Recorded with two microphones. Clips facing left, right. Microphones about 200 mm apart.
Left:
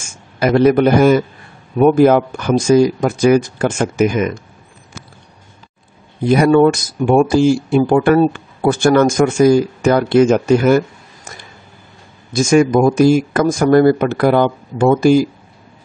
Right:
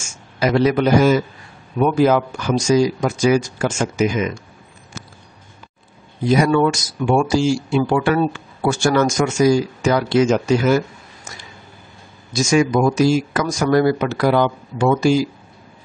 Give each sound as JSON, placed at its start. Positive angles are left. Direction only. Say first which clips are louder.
{"t": 0.0, "sound": "a man's voice", "louder": "left 3 dB", "side_deg": 55}
{"t": 6.2, "sound": "speech", "louder": "left 5 dB", "side_deg": 60}
{"t": 12.3, "sound": "speech", "louder": "left 5 dB", "side_deg": 55}